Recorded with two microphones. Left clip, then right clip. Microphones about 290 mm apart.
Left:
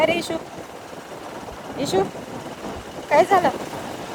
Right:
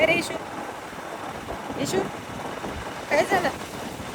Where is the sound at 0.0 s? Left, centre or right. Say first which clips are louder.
Left 1 dB; left.